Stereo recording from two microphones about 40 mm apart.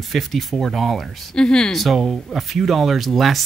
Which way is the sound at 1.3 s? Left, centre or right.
Centre.